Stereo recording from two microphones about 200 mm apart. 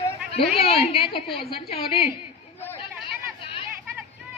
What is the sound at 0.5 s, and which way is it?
A woman's voice, 30° left (ahead or behind).